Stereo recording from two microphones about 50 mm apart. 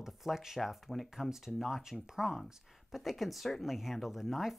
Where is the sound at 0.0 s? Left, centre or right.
Centre.